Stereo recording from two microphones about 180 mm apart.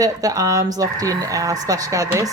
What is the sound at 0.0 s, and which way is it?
Speech, 20° right (ahead or behind).